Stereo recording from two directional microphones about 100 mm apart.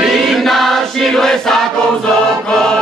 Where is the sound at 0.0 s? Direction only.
Centre (ahead or behind).